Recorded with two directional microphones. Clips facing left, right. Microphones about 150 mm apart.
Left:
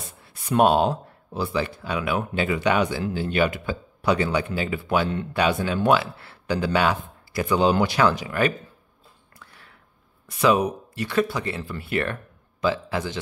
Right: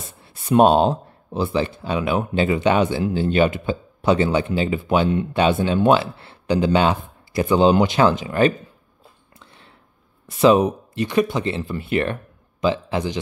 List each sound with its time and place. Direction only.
0.2 s speech: 25° right (ahead or behind)
9.4 s a sound: 25° right (ahead or behind)
10.4 s speech: 25° right (ahead or behind)